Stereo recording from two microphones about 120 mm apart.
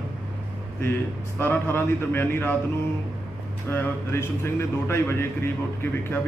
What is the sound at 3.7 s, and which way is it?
A man's voice, 20° left (ahead or behind).